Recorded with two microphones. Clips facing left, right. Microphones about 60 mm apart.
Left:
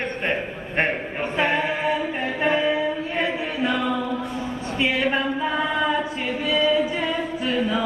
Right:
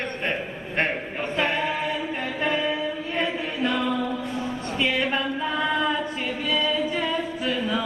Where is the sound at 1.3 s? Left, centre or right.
Left.